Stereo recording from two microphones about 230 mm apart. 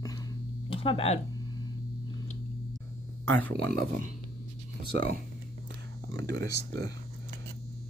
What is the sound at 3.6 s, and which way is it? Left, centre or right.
Speech, right.